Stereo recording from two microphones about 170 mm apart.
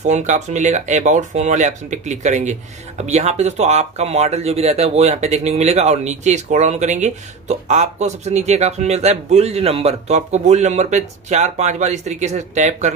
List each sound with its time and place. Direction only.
0.0 s speech: 45° right (ahead or behind)